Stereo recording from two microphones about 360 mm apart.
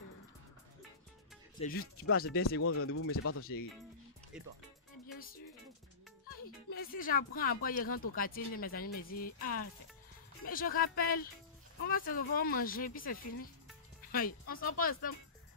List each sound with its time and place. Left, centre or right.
1.6 s speech: left
2.2 s speech: left
6.4 s speech: left
14.5 s speech: left